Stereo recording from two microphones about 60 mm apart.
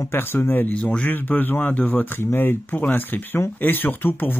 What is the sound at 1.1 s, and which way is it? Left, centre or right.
Speech, left.